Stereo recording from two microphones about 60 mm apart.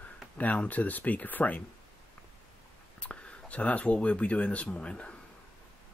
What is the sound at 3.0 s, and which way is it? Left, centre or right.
Speech, centre.